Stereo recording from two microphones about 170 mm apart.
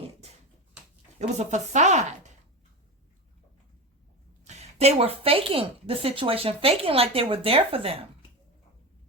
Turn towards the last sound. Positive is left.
turn(degrees=-35)  # may be behind; listen again after turning